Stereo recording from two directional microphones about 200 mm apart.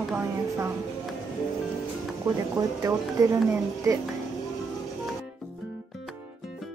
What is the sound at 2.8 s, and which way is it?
Speech, 15° right (ahead or behind).